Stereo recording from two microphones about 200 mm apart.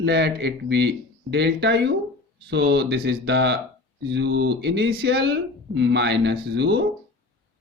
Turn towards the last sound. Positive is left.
turn(degrees=-60)  # may be behind; listen again after turning